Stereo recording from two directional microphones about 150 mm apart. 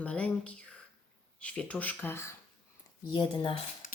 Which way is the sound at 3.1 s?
35° left (ahead or behind).